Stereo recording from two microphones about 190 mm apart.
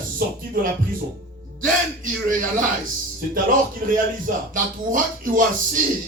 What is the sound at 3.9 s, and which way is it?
Speech, 45° right (ahead or behind).